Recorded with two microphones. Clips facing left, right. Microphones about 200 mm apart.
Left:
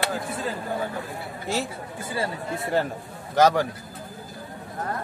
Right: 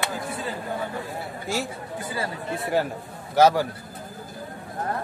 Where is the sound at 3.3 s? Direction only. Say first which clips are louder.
Right 1 dB; 10° right (ahead or behind).